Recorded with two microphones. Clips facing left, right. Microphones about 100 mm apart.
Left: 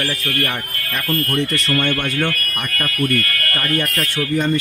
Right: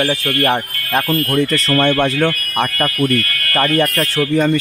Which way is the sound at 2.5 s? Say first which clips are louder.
Right 7 dB; 90° right.